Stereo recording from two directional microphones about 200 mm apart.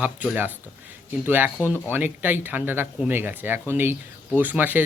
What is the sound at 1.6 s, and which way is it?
Speech, 10° right (ahead or behind).